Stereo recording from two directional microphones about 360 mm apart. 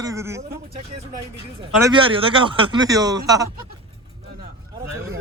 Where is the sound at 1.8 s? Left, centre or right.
Centre.